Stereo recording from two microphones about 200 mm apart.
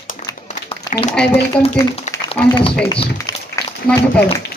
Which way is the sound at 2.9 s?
20° left (ahead or behind).